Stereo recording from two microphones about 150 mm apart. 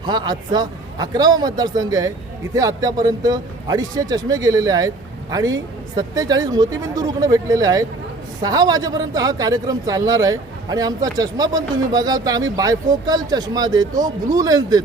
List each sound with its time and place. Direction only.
0.0 s a man's voice: 30° right (ahead or behind)